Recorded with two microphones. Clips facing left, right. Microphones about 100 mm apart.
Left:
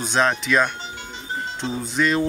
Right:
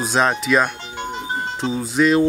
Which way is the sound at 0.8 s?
65° right (ahead or behind).